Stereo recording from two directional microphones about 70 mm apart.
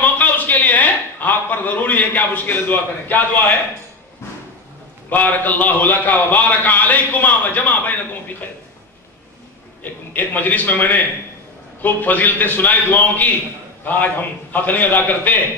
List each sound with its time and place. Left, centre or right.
0.0 s a man's voice: left
5.1 s a man's voice: left
10.1 s a man's voice: left
14.5 s a man's voice: left